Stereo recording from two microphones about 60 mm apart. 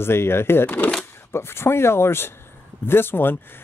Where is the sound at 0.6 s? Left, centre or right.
Left.